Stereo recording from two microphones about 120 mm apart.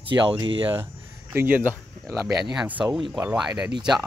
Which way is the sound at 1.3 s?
20° right (ahead or behind).